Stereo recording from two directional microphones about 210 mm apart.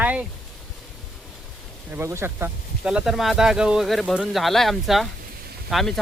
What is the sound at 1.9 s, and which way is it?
Speech, 10° right (ahead or behind).